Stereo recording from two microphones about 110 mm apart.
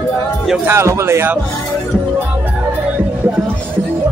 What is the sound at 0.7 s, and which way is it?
Speech, 25° right (ahead or behind).